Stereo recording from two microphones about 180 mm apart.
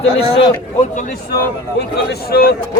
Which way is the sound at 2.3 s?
55° left (ahead or behind).